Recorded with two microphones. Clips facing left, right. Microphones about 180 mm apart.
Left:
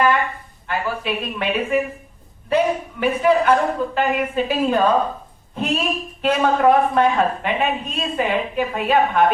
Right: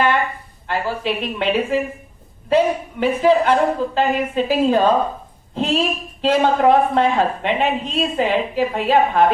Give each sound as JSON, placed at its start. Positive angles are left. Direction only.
{"t": 0.7, "sound": "a woman's voice", "side_deg": -30}